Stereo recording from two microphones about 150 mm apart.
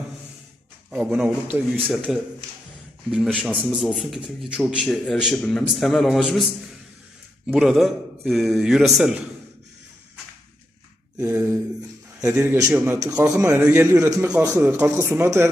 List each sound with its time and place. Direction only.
0.9 s a man's voice: 5° right (ahead or behind)
7.4 s a man's voice: 5° right (ahead or behind)
11.2 s a man's voice: 15° right (ahead or behind)